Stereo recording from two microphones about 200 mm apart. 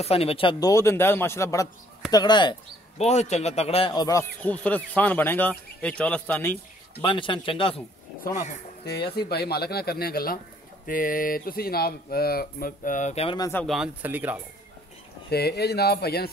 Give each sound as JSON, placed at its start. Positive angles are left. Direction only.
{"t": 0.0, "sound": "a man's voice", "side_deg": 30}
{"t": 3.0, "sound": "a man's voice", "side_deg": 35}
{"t": 7.0, "sound": "speech", "side_deg": 25}
{"t": 8.8, "sound": "speech", "side_deg": 55}
{"t": 13.4, "sound": "a man's voice", "side_deg": 10}
{"t": 13.7, "sound": "speech", "side_deg": -5}
{"t": 15.2, "sound": "speech", "side_deg": 55}